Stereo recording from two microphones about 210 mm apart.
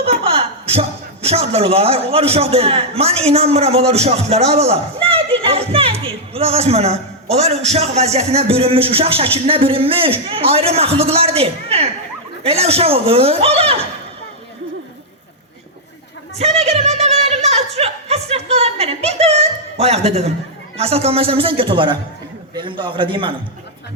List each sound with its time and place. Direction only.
0.0 s a man's voice: 25° right (ahead or behind)
16.6 s a man's voice: 30° right (ahead or behind)